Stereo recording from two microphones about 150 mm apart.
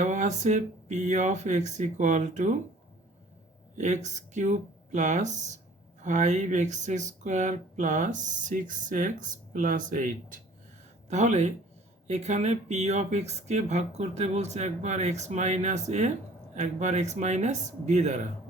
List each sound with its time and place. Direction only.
0.0 s speech: 55° right (ahead or behind)
3.8 s speech: 50° right (ahead or behind)
11.1 s speech: 50° right (ahead or behind)